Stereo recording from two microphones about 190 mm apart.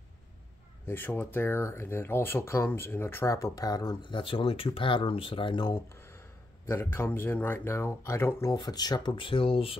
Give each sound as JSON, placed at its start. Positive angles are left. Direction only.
{"t": 0.8, "sound": "speech", "side_deg": 10}